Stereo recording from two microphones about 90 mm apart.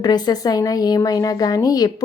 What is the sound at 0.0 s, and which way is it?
Speech, 45° left (ahead or behind).